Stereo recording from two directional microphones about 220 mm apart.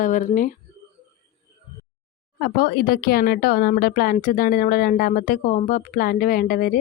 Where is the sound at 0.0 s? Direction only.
35° left (ahead or behind).